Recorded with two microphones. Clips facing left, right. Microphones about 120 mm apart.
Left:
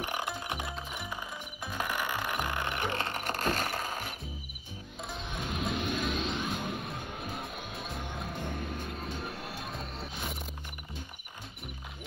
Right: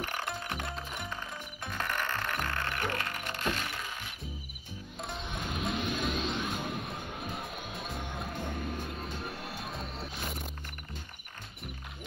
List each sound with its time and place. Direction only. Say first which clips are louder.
0.0 s music: left 2 dB; 15° left (ahead or behind)
0.6 s music: even; 5° left (ahead or behind); by 3.3 s 30° left (ahead or behind)
3.3 s a sound: left 4 dB; 40° left (ahead or behind)
5.0 s music: even; centre (ahead or behind)